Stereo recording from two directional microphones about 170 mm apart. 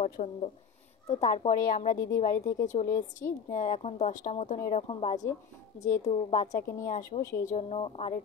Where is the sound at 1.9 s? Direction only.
20° left (ahead or behind).